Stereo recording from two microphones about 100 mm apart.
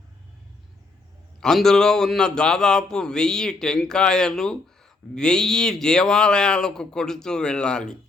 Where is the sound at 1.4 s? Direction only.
5° left (ahead or behind).